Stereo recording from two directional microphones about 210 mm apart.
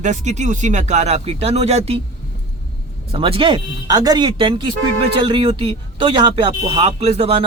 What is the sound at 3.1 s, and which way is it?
Speech, 25° right (ahead or behind).